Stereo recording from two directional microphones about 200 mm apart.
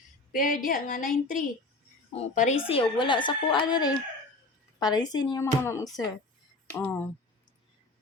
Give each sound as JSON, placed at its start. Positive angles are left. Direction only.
{"t": 0.3, "sound": "a woman's voice", "side_deg": 40}